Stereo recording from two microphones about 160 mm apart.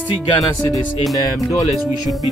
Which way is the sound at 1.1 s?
25° left (ahead or behind).